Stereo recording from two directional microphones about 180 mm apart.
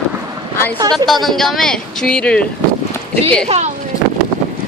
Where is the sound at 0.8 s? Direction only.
20° right (ahead or behind).